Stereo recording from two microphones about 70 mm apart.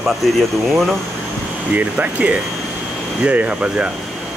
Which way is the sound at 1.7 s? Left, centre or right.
Right.